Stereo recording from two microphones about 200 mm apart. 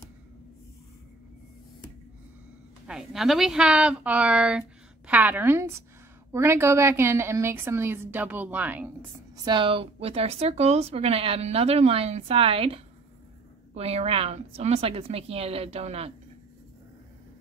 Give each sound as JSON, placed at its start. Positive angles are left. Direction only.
{"t": 2.9, "sound": "a woman's voice", "side_deg": 0}
{"t": 9.4, "sound": "a woman's voice", "side_deg": -25}